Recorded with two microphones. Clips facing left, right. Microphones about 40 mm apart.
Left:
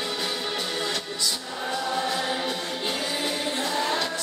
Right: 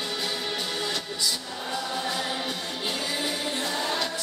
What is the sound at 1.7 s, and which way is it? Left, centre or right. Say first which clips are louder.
Music: left 3 dB; centre.